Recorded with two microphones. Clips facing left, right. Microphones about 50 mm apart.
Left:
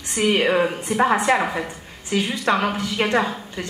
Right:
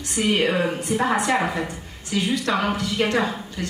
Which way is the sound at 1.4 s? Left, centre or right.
Centre.